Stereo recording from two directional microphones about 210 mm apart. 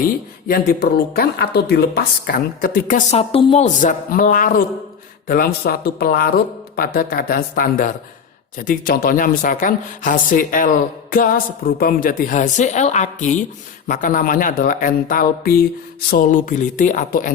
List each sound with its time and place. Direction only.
0.0 s speech: 45° left (ahead or behind)
3.2 s speech: 25° left (ahead or behind)